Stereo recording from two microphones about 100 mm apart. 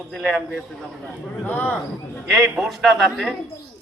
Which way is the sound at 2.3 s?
Centre (ahead or behind).